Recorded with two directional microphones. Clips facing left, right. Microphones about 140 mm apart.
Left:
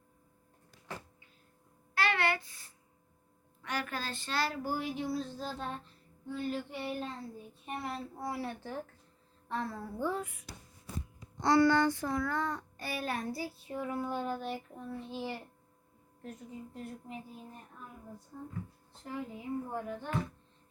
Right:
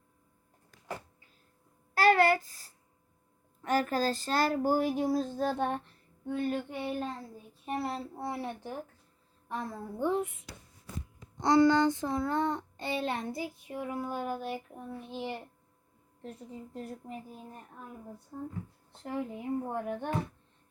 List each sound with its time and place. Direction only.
2.0 s a sound: 40° right (ahead or behind)
3.6 s speech: 40° right (ahead or behind)
7.6 s a child's voice: 35° right (ahead or behind); by 15.4 s 20° right (ahead or behind)
16.2 s a woman's voice: 35° right (ahead or behind)
18.3 s speech: 50° right (ahead or behind)